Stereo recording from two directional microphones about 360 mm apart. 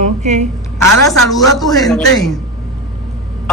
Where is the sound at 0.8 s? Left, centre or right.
Centre.